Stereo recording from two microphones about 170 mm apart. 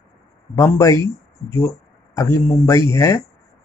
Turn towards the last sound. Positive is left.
turn(degrees=15)  # may be behind; listen again after turning